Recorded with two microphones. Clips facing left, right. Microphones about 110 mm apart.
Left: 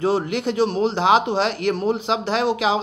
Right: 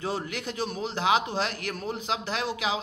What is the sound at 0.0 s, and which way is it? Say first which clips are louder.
Speech: left 11 dB; 65° left (ahead or behind).